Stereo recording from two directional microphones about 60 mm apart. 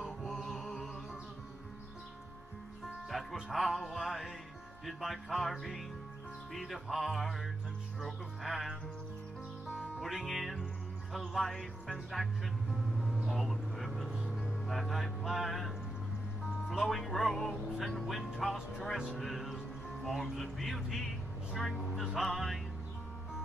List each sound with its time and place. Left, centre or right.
0.0 s music: centre
3.1 s music: centre
3.3 s speech: centre
9.7 s music: centre
11.1 s speech: centre
12.7 s music: centre
13.3 s vehicle: centre
14.7 s speech: centre